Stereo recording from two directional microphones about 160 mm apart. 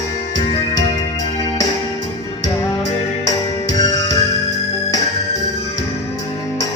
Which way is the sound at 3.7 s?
25° left (ahead or behind).